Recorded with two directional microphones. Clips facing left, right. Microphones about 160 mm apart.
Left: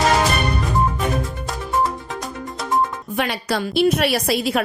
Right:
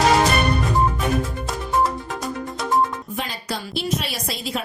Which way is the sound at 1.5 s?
Centre (ahead or behind).